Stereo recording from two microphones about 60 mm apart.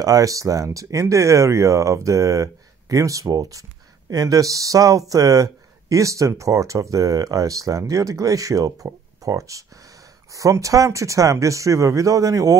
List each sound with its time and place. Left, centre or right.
0.0 s speech: right